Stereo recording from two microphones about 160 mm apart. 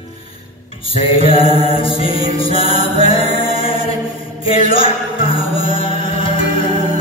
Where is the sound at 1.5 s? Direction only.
35° left (ahead or behind).